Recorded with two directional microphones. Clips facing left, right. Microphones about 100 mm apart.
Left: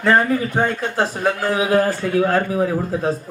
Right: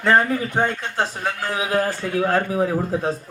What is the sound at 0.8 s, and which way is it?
Speech, 15° left (ahead or behind).